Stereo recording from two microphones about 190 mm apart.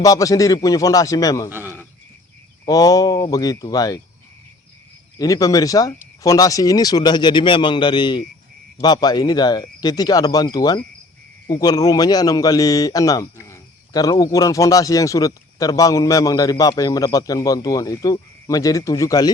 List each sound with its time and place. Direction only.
0.0 s a man's voice: 20° left (ahead or behind)
1.5 s a sound: 10° right (ahead or behind)
2.6 s a man's voice: 20° left (ahead or behind)
5.2 s a man's voice: 20° left (ahead or behind)